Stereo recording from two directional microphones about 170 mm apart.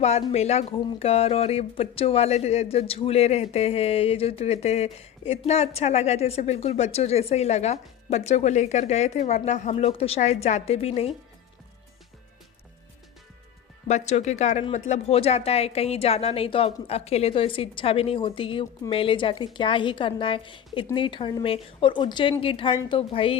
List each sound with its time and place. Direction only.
0.0 s speech: 40° left (ahead or behind)
13.8 s a woman's voice: 40° left (ahead or behind)